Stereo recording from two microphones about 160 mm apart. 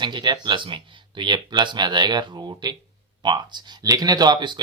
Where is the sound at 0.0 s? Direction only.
30° right (ahead or behind).